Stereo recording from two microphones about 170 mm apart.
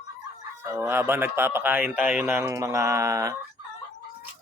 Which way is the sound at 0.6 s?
15° right (ahead or behind).